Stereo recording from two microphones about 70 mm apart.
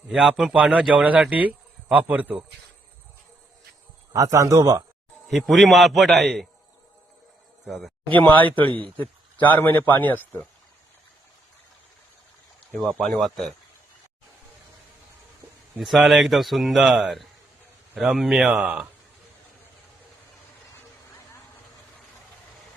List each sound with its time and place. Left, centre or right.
0.1 s a man's voice: centre
0.5 s speech: centre
4.1 s a man's voice: right
5.3 s speech: centre
7.7 s speech: centre
8.2 s a man's voice: left
12.7 s speech: centre
15.8 s speech: centre
18.6 s a man's voice: centre